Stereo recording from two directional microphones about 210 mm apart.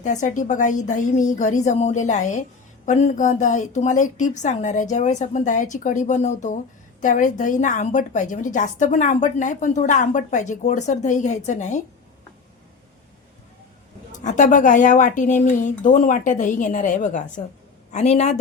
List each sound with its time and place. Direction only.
0.0 s a woman's voice: 35° left (ahead or behind)
14.1 s a woman's voice: 35° left (ahead or behind)